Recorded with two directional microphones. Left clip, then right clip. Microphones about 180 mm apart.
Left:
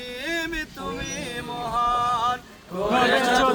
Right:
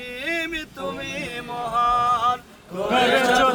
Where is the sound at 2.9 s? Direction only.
10° right (ahead or behind).